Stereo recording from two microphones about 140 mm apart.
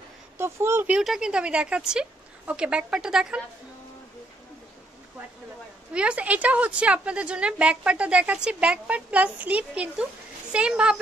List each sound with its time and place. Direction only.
0.4 s speech: 20° right (ahead or behind)
0.9 s a woman's voice: 5° right (ahead or behind)
5.9 s a woman's voice: 10° right (ahead or behind)